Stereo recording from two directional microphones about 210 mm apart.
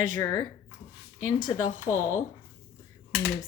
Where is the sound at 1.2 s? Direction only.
20° left (ahead or behind).